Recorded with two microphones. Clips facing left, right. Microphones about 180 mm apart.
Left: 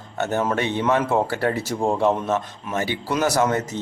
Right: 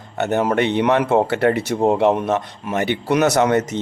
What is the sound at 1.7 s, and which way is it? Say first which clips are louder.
Speech: right 2 dB; 20° right (ahead or behind).